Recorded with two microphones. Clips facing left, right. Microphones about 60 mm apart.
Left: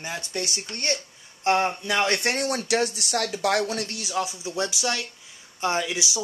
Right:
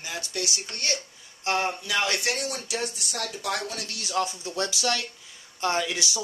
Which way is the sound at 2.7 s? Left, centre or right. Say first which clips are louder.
Left 8 dB; left.